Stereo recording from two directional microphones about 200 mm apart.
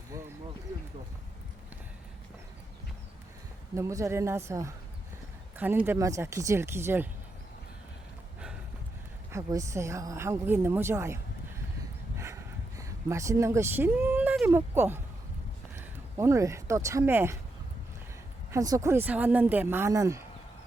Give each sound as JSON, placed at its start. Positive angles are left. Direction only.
{"t": 3.8, "sound": "speech", "side_deg": -15}
{"t": 9.3, "sound": "speech", "side_deg": -15}
{"t": 12.1, "sound": "a sound", "side_deg": -15}
{"t": 15.7, "sound": "speech", "side_deg": -15}
{"t": 18.5, "sound": "speech", "side_deg": -15}